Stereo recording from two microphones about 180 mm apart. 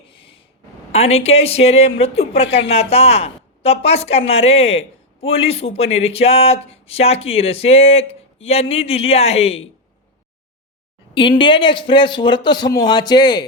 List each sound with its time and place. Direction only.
0.1 s a sound: 30° left (ahead or behind)
0.9 s speech: 35° left (ahead or behind)
11.1 s speech: 25° left (ahead or behind)